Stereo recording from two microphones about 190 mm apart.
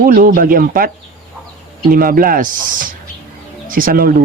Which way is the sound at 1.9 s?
50° right (ahead or behind).